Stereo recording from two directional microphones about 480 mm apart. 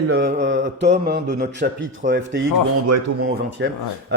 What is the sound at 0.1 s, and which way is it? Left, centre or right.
Mantra, centre.